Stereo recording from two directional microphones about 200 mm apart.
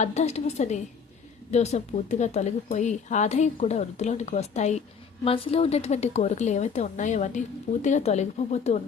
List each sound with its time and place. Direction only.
0.0 s a woman's voice: 35° left (ahead or behind)